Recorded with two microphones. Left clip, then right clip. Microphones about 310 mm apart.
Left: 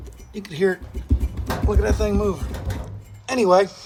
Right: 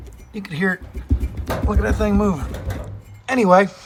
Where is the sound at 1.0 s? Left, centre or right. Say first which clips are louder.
Right 1 dB; centre.